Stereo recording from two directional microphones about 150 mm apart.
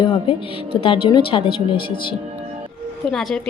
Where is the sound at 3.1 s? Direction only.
Centre (ahead or behind).